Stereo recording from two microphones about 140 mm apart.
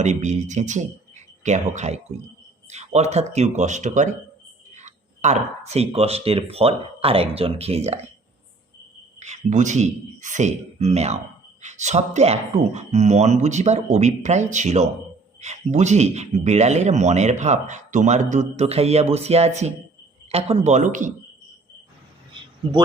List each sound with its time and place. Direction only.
0.0 s a man's voice: 55° right (ahead or behind)
9.1 s a man's voice: 55° right (ahead or behind)
20.7 s a man's voice: 60° right (ahead or behind)